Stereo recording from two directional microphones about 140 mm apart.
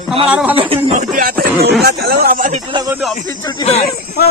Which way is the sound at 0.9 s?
75° right (ahead or behind).